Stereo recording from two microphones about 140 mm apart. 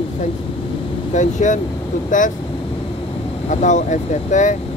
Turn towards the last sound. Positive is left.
turn(degrees=60)  # may be behind; listen again after turning